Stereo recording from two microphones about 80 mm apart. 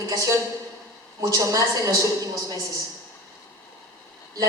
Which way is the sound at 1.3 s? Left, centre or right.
Right.